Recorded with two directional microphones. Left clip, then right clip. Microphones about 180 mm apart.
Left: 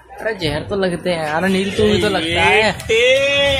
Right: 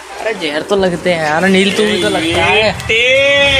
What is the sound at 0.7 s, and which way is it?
Speech, 5° left (ahead or behind).